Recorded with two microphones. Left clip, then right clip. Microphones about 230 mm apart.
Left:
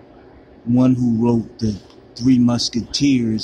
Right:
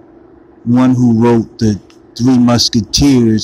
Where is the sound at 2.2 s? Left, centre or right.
Centre.